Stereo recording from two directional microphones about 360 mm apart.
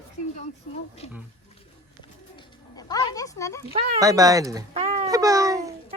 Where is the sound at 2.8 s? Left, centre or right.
Centre.